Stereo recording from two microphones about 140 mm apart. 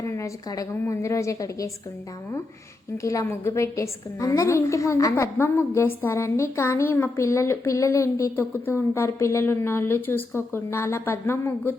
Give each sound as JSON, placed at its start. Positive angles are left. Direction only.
{"t": 0.0, "sound": "a woman's voice", "side_deg": 20}
{"t": 3.0, "sound": "a woman's voice", "side_deg": 20}